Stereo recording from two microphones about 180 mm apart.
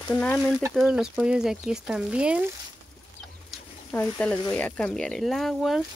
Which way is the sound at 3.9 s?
10° left (ahead or behind).